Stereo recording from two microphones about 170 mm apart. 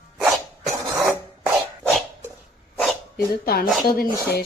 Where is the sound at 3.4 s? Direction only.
65° left (ahead or behind).